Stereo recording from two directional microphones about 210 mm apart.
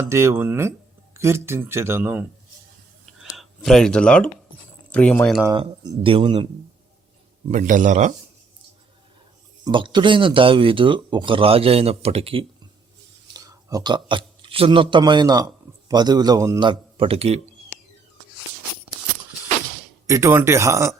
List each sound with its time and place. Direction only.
0.1 s speech: 15° right (ahead or behind)
3.1 s a sound: centre (ahead or behind)
4.9 s speech: 5° left (ahead or behind)
5.5 s speech: 20° right (ahead or behind)
7.4 s a man's voice: 35° right (ahead or behind)
9.6 s a man's voice: 20° right (ahead or behind)
20.1 s speech: 15° right (ahead or behind)